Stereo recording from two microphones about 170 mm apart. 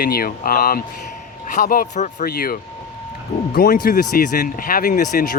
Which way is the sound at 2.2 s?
60° left (ahead or behind).